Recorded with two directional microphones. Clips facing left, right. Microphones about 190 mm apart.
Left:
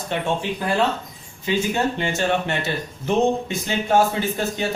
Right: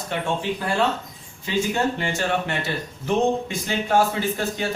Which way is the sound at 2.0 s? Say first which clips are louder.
Left 2 dB; 25° left (ahead or behind).